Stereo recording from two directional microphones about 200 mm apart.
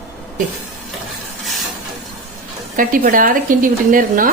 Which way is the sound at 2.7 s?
45° right (ahead or behind).